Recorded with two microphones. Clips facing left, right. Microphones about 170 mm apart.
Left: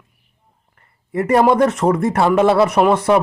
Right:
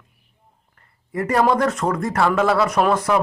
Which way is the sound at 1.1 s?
25° left (ahead or behind).